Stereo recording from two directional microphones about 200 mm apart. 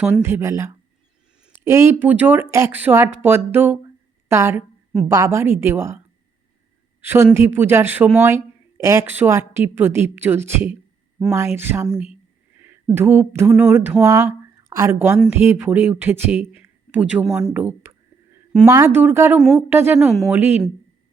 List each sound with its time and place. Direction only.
0.0 s speech: 10° right (ahead or behind)
7.0 s speech: 10° right (ahead or behind)